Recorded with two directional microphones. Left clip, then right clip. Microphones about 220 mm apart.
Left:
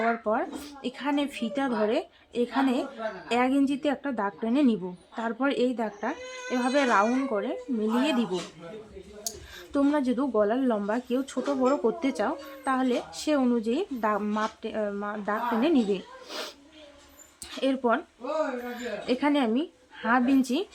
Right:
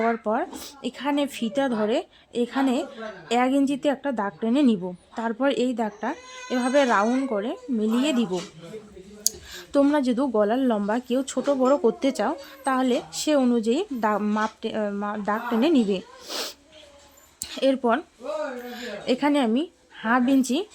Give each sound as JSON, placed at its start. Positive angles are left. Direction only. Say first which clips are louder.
{"t": 0.0, "sound": "speech", "louder": "right 2 dB", "side_deg": -35}